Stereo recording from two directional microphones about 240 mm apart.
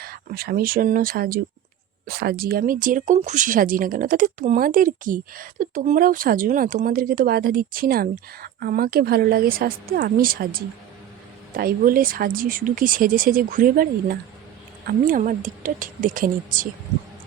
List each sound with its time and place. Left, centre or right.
0.0 s speech: right